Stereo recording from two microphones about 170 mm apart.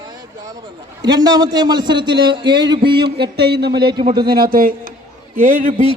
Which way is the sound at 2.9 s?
75° right (ahead or behind).